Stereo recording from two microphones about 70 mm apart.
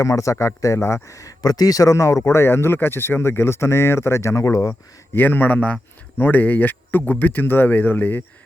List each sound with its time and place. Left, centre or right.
0.0 s speech: left
5.1 s speech: left